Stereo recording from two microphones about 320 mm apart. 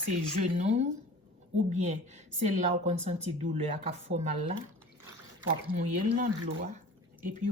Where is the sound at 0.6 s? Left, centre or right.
Right.